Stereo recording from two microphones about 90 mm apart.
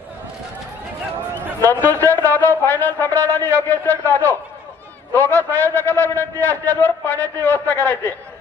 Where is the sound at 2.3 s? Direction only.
20° left (ahead or behind).